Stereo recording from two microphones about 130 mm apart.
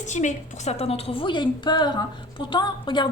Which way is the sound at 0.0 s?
65° left (ahead or behind).